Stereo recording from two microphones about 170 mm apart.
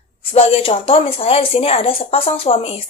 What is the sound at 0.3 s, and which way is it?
Speech, 35° left (ahead or behind).